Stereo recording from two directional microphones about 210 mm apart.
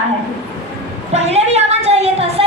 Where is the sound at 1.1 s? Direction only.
30° right (ahead or behind).